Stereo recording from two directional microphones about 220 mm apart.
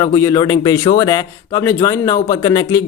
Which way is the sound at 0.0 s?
10° left (ahead or behind).